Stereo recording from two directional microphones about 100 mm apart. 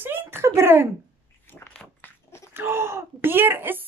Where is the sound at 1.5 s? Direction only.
20° left (ahead or behind).